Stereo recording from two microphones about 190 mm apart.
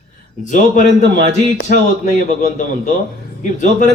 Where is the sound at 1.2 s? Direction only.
70° right (ahead or behind).